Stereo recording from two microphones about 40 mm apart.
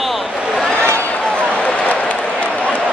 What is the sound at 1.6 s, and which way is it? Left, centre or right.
Run, left.